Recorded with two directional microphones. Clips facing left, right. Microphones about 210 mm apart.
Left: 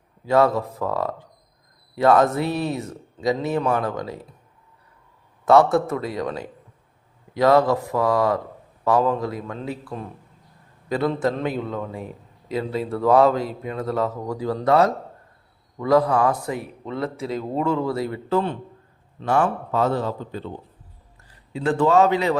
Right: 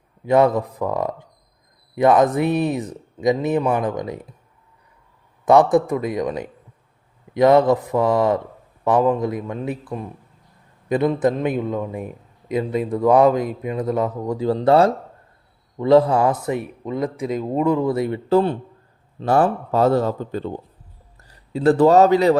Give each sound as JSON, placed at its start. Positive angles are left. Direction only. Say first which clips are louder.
{"t": 0.3, "sound": "a man's voice", "louder": "right 2 dB", "side_deg": -20}
{"t": 5.5, "sound": "a man's voice", "louder": "right 2 dB", "side_deg": -15}
{"t": 18.3, "sound": "a man's voice", "louder": "right 7 dB", "side_deg": -35}